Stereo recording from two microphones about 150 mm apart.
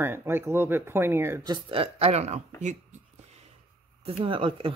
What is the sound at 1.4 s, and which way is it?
Speech, 35° right (ahead or behind).